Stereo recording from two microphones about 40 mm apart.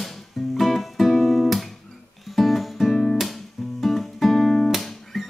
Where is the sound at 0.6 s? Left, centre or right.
Centre.